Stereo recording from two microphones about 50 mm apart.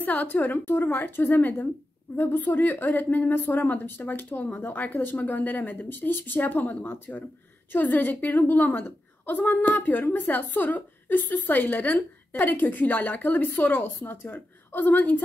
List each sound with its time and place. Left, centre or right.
0.0 s a woman's voice: left